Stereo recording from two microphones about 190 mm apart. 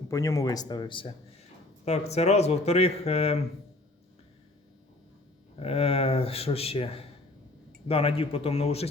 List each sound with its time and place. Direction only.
0.1 s speech: 20° left (ahead or behind)
5.5 s speech: 30° left (ahead or behind)